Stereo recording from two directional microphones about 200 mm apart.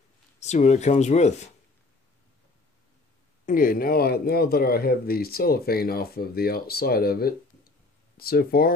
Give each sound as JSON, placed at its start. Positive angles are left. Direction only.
{"t": 0.4, "sound": "speech", "side_deg": 35}
{"t": 3.4, "sound": "speech", "side_deg": 45}